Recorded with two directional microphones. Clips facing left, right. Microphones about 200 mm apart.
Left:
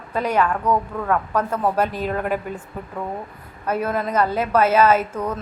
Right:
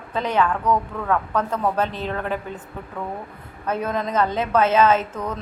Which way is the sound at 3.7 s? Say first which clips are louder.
Left 2 dB; 10° left (ahead or behind).